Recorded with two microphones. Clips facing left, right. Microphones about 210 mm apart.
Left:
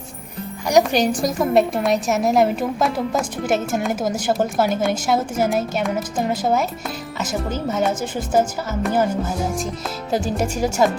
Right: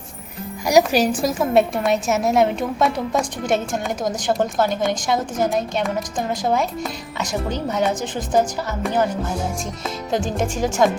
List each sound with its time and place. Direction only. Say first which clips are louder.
0.7 s a woman's voice: right 1 dB; 5° right (ahead or behind)
10.1 s speech: left 1 dB; 5° left (ahead or behind)